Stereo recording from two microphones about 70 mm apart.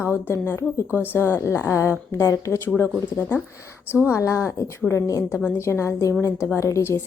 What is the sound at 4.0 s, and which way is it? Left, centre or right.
Speech, left.